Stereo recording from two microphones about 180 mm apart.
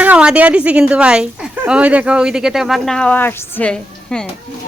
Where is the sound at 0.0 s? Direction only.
5° right (ahead or behind).